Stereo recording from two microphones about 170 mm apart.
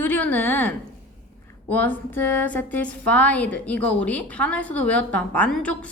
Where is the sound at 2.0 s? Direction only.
10° left (ahead or behind).